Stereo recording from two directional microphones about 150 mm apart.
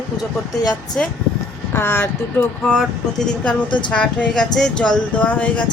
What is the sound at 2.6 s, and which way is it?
Speech, 5° left (ahead or behind).